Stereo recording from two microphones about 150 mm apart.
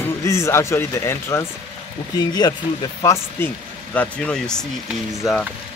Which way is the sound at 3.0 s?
10° left (ahead or behind).